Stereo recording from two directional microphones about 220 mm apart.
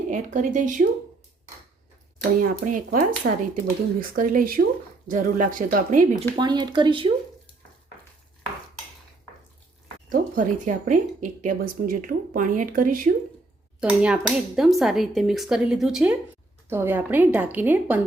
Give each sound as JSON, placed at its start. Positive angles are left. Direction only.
{"t": 0.1, "sound": "a woman's voice", "side_deg": -35}
{"t": 2.4, "sound": "a woman's voice", "side_deg": -40}
{"t": 6.3, "sound": "speech", "side_deg": -20}
{"t": 10.1, "sound": "a woman's voice", "side_deg": -40}
{"t": 13.8, "sound": "a woman's voice", "side_deg": -5}